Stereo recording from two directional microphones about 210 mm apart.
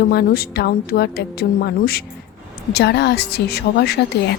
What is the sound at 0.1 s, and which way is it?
Speech, 50° left (ahead or behind).